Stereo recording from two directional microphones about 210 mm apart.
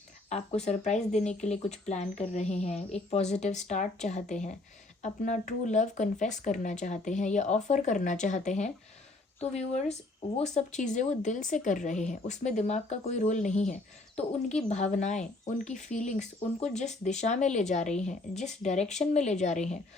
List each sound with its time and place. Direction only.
0.3 s speech: 35° left (ahead or behind)